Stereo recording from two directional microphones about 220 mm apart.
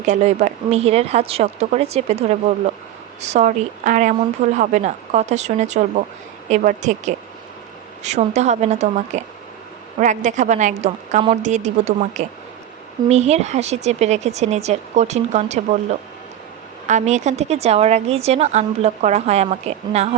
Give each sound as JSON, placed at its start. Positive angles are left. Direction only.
{"t": 0.0, "sound": "a woman's voice", "side_deg": -30}